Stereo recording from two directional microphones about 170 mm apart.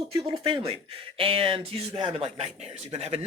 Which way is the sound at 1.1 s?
30° right (ahead or behind).